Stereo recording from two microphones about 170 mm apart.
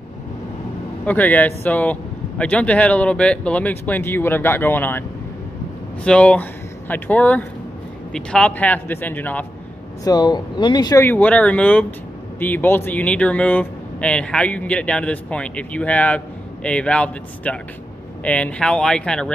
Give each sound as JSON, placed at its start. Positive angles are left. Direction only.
{"t": 1.0, "sound": "speech", "side_deg": 10}
{"t": 6.0, "sound": "speech", "side_deg": 5}
{"t": 10.0, "sound": "speech", "side_deg": 25}